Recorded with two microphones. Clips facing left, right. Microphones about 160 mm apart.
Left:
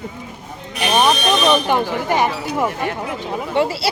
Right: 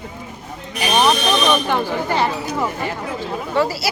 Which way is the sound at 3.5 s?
25° left (ahead or behind).